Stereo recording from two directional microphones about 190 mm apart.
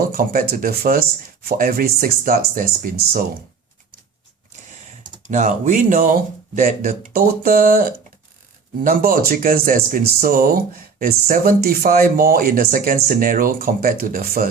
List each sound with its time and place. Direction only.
0.1 s speech: 50° right (ahead or behind)
5.3 s speech: 40° right (ahead or behind)